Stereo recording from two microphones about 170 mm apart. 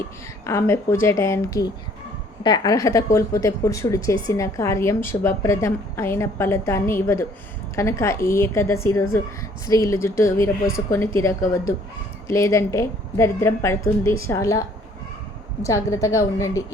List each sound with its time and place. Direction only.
0.4 s a woman's voice: 15° left (ahead or behind)
15.6 s a woman's voice: 20° left (ahead or behind)